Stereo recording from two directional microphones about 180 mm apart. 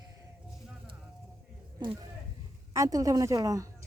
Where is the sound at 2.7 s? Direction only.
20° right (ahead or behind).